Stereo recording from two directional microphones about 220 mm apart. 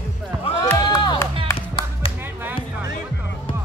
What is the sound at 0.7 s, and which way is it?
Music, 20° left (ahead or behind).